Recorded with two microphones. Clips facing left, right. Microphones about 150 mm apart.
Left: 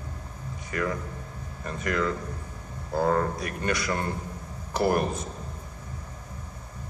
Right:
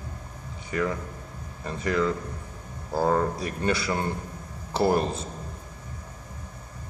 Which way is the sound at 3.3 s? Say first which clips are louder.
Right 2 dB; 30° right (ahead or behind).